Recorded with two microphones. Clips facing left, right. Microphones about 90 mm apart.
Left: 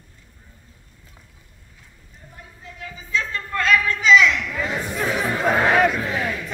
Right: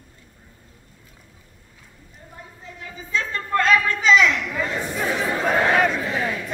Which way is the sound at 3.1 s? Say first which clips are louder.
Right 2 dB; 40° right (ahead or behind).